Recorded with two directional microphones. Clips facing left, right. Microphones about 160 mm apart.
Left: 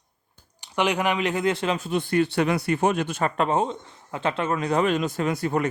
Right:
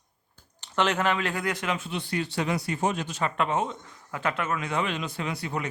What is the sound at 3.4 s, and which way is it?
A man's voice, 35° left (ahead or behind).